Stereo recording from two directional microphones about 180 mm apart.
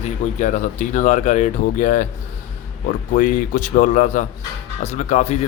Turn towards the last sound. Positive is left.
turn(degrees=40)  # may be behind; listen again after turning